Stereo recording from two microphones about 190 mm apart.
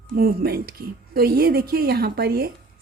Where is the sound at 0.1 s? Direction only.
50° right (ahead or behind).